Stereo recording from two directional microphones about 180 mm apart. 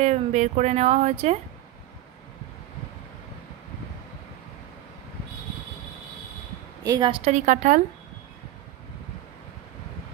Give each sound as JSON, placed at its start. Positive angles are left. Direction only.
{"t": 0.0, "sound": "speech", "side_deg": -40}
{"t": 6.8, "sound": "a woman's voice", "side_deg": -20}
{"t": 7.2, "sound": "speech", "side_deg": -40}